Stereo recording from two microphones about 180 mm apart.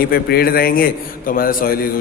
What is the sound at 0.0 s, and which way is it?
A man's voice, 60° left (ahead or behind).